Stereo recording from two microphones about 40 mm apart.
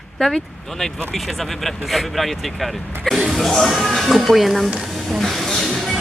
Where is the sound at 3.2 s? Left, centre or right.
Centre.